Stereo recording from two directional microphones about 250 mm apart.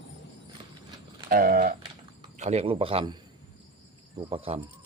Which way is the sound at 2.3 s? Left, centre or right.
Right.